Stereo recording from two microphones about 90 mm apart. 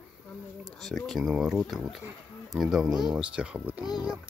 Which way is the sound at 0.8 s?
5° left (ahead or behind).